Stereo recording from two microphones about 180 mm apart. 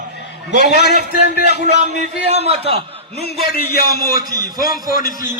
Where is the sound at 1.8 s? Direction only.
40° right (ahead or behind).